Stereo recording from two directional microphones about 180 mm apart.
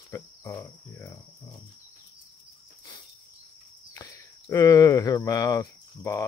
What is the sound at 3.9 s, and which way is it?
Speech, 15° left (ahead or behind).